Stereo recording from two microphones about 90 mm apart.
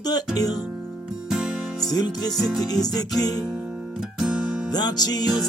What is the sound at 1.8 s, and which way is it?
Music, 45° left (ahead or behind).